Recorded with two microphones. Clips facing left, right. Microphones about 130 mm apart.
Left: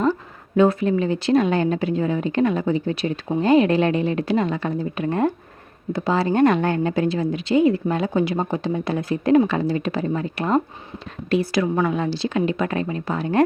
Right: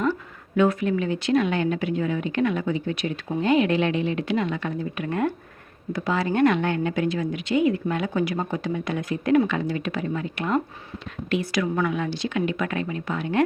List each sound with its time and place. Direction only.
0.5 s speech: 30° left (ahead or behind)